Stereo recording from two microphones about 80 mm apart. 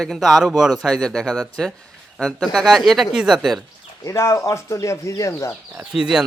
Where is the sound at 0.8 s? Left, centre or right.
Centre.